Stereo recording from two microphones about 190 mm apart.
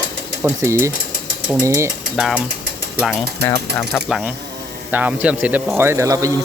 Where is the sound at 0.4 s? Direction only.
15° right (ahead or behind).